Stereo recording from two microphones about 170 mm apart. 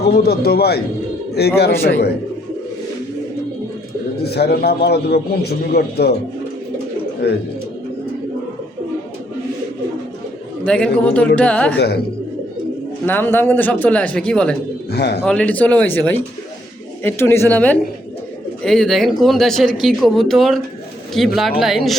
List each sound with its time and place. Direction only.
0.1 s a man's voice: 65° left (ahead or behind)
1.7 s speech: 15° left (ahead or behind)
4.3 s a man's voice: 70° left (ahead or behind)
7.2 s a man's voice: 75° left (ahead or behind)
10.7 s speech: 5° left (ahead or behind)
13.1 s speech: 10° left (ahead or behind)
14.8 s a man's voice: 75° left (ahead or behind)
15.2 s speech: 10° left (ahead or behind)